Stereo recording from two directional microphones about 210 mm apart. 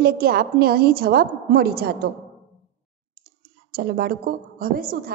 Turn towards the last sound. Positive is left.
turn(degrees=-40)  # may be behind; listen again after turning